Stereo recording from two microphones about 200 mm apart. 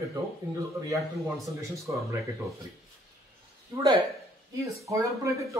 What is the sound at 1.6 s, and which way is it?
Speech, 15° right (ahead or behind).